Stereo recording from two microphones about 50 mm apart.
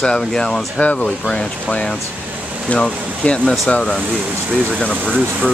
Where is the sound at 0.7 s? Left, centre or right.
Left.